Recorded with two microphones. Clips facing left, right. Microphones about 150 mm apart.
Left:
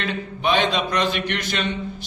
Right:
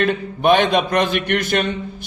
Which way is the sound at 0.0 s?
50° right (ahead or behind).